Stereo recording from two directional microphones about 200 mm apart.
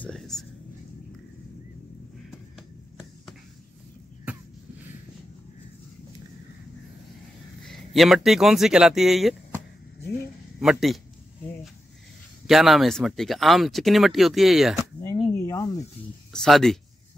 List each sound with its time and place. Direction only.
0.0 s a sound: centre (ahead or behind)
7.6 s speech: centre (ahead or behind)
10.6 s speech: centre (ahead or behind)
12.4 s speech: centre (ahead or behind)
15.0 s a sound: 20° left (ahead or behind)
15.3 s snake: 15° left (ahead or behind)
16.4 s speech: centre (ahead or behind)